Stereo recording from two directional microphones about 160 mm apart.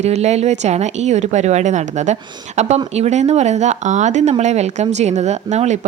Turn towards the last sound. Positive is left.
turn(degrees=-45)  # may be behind; listen again after turning